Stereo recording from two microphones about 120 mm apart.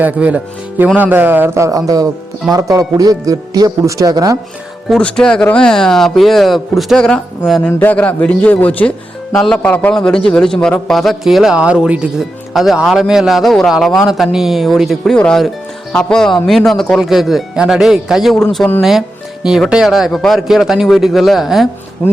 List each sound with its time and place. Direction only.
0.0 s a man's voice: 10° right (ahead or behind); by 4.4 s 30° right (ahead or behind)
4.9 s a man's voice: 5° left (ahead or behind)
7.7 s a man's voice: 15° left (ahead or behind); by 21.7 s centre (ahead or behind)